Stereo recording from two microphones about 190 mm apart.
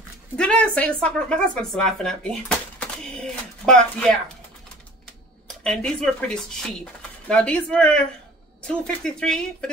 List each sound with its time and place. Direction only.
0.4 s speech: 5° left (ahead or behind)
5.6 s speech: 5° left (ahead or behind)